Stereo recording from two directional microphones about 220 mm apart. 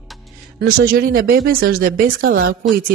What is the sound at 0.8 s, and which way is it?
Speech, 40° right (ahead or behind).